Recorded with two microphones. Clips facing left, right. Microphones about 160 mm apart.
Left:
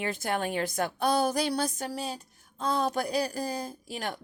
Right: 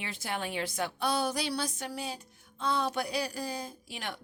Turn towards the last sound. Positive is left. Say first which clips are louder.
# left 5 dB
turn(degrees=40)  # may be behind; listen again after turning